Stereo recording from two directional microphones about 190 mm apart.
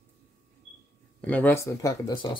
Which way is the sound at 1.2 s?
10° left (ahead or behind).